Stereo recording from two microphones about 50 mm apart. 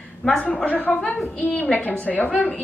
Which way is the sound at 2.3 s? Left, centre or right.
Centre.